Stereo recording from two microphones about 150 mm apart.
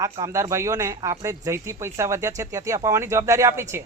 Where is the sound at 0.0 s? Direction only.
20° right (ahead or behind).